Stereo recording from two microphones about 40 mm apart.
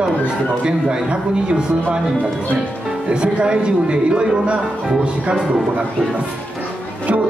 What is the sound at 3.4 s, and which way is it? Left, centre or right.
A man's voice, right.